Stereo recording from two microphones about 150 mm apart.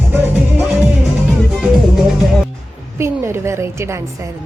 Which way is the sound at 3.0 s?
20° right (ahead or behind).